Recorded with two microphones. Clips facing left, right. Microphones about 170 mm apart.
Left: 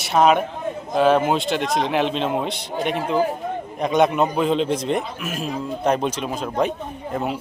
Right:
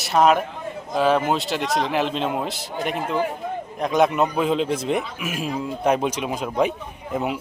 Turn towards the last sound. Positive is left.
turn(degrees=-15)  # may be behind; listen again after turning